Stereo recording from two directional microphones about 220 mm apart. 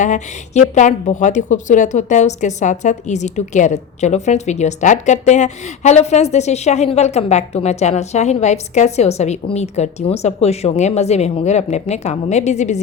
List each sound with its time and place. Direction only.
0.0 s a woman's voice: 35° left (ahead or behind)